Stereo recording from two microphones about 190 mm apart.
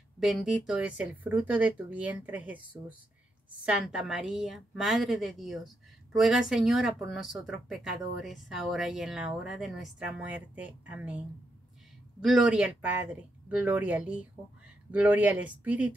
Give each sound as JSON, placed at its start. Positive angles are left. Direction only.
{"t": 0.2, "sound": "speech", "side_deg": 0}